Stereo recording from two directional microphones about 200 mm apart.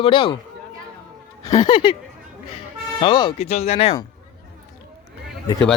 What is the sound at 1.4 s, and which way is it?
Speech, 20° left (ahead or behind).